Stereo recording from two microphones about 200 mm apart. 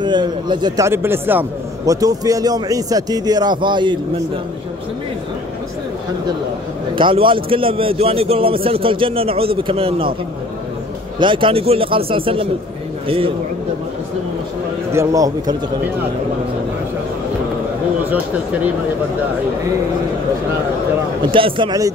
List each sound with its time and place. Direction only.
0.0 s a man's voice: 20° right (ahead or behind)
7.0 s a man's voice: 25° right (ahead or behind)
11.1 s a man's voice: 25° right (ahead or behind)
14.9 s a man's voice: 15° right (ahead or behind)
21.3 s a man's voice: 25° right (ahead or behind)